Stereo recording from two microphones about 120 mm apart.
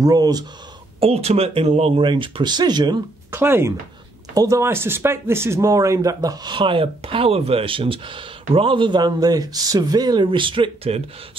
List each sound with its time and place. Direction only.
0.0 s speech: 30° right (ahead or behind)
1.0 s speech: 60° right (ahead or behind); by 3.0 s 35° right (ahead or behind)
3.3 s speech: 20° right (ahead or behind); by 11.0 s 50° right (ahead or behind)